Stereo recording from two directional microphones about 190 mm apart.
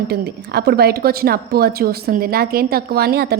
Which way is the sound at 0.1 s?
55° right (ahead or behind).